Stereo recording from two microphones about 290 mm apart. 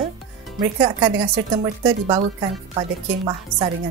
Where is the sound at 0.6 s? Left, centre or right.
Centre.